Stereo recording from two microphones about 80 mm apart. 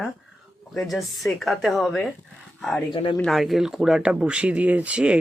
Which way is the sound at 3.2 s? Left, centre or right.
Centre.